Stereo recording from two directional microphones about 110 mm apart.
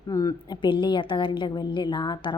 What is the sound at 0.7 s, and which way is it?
Speech, 50° left (ahead or behind).